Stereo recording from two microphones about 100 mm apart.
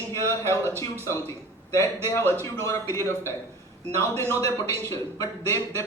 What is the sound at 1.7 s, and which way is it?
A woman's voice, 30° left (ahead or behind).